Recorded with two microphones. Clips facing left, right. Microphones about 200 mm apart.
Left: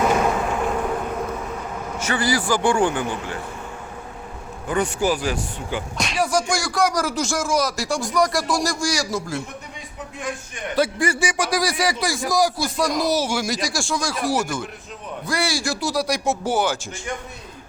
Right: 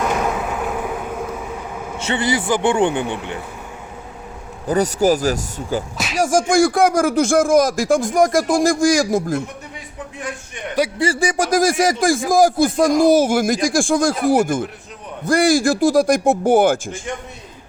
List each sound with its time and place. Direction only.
0.0 s vehicle: centre (ahead or behind)
2.0 s a man's voice: 25° right (ahead or behind)
4.7 s speech: 40° right (ahead or behind)
10.8 s a man's voice: 15° right (ahead or behind)
11.3 s speech: 45° right (ahead or behind)